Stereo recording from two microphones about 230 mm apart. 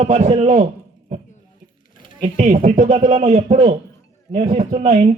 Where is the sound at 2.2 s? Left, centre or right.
Right.